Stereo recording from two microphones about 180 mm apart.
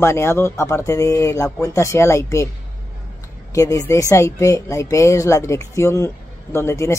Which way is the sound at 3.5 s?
20° left (ahead or behind).